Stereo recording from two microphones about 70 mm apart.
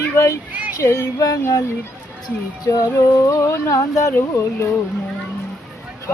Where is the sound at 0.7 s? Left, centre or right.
Left.